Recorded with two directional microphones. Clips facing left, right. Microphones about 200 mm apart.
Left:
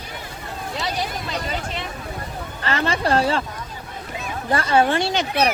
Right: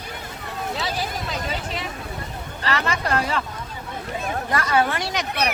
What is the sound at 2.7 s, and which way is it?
Speech, 30° left (ahead or behind).